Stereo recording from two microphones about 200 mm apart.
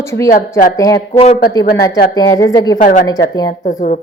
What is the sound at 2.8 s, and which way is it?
A woman's voice, 40° left (ahead or behind).